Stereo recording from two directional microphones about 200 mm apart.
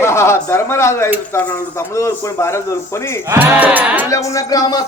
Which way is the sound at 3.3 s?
10° right (ahead or behind).